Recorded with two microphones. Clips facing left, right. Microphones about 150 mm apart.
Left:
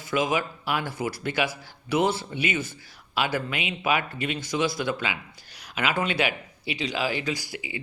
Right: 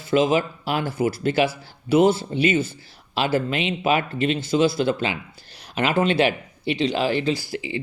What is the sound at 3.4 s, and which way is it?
Speech, 30° right (ahead or behind).